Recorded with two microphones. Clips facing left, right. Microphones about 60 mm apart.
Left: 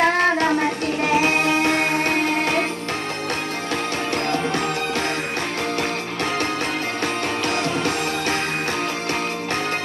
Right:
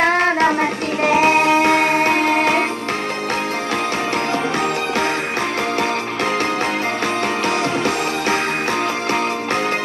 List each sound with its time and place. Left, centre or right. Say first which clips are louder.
0.4 s music: right 3 dB; right
7.4 s music: right 2 dB; centre